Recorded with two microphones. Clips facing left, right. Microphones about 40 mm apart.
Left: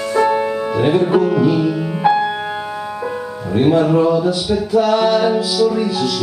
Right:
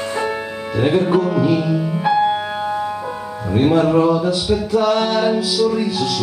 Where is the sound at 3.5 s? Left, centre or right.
Centre.